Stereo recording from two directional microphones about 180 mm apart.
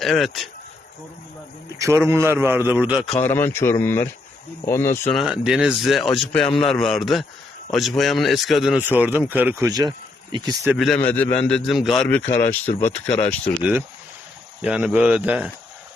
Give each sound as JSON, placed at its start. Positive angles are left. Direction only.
{"t": 0.0, "sound": "a man's voice", "side_deg": 0}
{"t": 1.8, "sound": "a man's voice", "side_deg": -15}
{"t": 3.2, "sound": "speech", "side_deg": 10}
{"t": 5.1, "sound": "a man's voice", "side_deg": -5}
{"t": 10.7, "sound": "a man's voice", "side_deg": 0}
{"t": 12.0, "sound": "speech", "side_deg": 10}
{"t": 13.6, "sound": "a man's voice", "side_deg": -5}